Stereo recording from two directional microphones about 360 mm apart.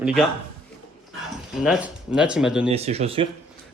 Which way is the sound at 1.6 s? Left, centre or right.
Centre.